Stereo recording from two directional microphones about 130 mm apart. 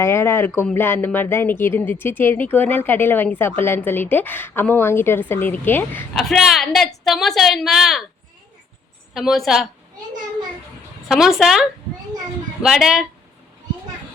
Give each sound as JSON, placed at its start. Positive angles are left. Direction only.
{"t": 0.0, "sound": "speech", "side_deg": 20}
{"t": 6.1, "sound": "a woman's voice", "side_deg": 0}
{"t": 9.1, "sound": "a woman's voice", "side_deg": 0}
{"t": 11.1, "sound": "a woman's voice", "side_deg": -5}